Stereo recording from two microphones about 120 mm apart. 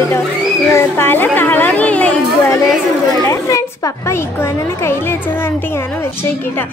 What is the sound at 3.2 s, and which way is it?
Speech, 25° left (ahead or behind).